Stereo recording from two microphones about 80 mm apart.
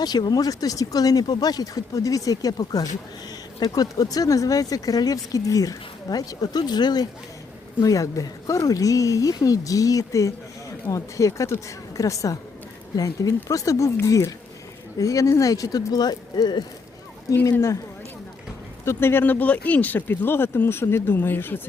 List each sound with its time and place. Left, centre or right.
0.0 s speech: left
7.8 s speech: left
18.9 s speech: left